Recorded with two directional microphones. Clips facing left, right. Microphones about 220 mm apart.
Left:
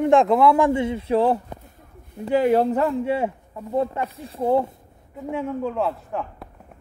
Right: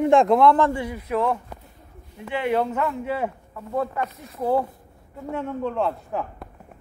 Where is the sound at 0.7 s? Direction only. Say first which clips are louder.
Left 6 dB; 25° left (ahead or behind); by 6.4 s centre (ahead or behind).